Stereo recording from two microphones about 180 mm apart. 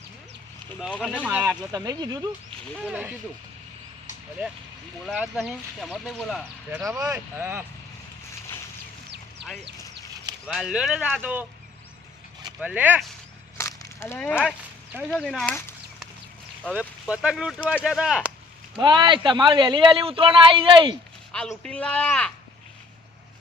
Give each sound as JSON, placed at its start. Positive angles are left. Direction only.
{"t": 0.8, "sound": "speech", "side_deg": 0}
{"t": 1.1, "sound": "speech", "side_deg": -10}
{"t": 1.7, "sound": "speech", "side_deg": -20}
{"t": 2.8, "sound": "speech", "side_deg": -10}
{"t": 5.0, "sound": "speech", "side_deg": 0}
{"t": 6.7, "sound": "speech", "side_deg": -15}
{"t": 9.4, "sound": "a sound", "side_deg": -70}
{"t": 10.4, "sound": "speech", "side_deg": -5}
{"t": 12.5, "sound": "speech", "side_deg": -5}
{"t": 13.6, "sound": "a sound", "side_deg": 15}
{"t": 15.1, "sound": "speech", "side_deg": 0}
{"t": 16.6, "sound": "speech", "side_deg": -5}
{"t": 18.8, "sound": "speech", "side_deg": -25}
{"t": 21.6, "sound": "speech", "side_deg": 5}